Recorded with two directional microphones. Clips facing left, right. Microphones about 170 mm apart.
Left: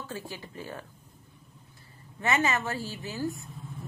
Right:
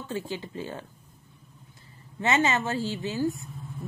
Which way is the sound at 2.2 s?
25° right (ahead or behind).